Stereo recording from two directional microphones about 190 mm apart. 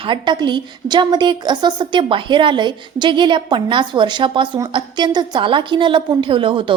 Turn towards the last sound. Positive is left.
turn(degrees=-25)  # may be behind; listen again after turning